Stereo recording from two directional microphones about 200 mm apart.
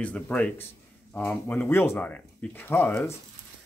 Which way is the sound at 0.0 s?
5° left (ahead or behind).